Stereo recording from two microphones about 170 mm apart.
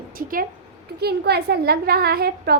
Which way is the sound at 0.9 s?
70° right (ahead or behind).